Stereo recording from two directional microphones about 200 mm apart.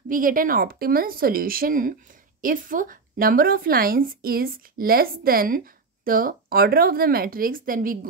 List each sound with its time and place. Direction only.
0.1 s speech: 45° right (ahead or behind)